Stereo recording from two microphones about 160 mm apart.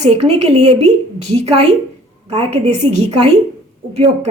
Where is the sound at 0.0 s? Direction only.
40° right (ahead or behind).